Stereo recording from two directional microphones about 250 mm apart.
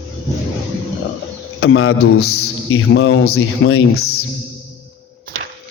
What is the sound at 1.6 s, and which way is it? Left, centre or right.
A man's voice, left.